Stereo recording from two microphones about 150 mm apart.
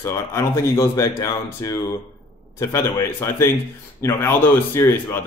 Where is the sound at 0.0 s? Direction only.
20° left (ahead or behind).